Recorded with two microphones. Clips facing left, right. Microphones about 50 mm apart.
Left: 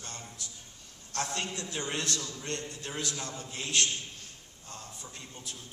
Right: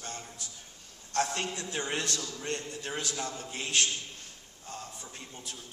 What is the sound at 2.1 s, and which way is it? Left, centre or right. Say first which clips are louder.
Speech: even; left.